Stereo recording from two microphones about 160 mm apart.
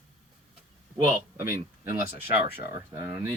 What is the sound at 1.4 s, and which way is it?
Speech, 15° right (ahead or behind).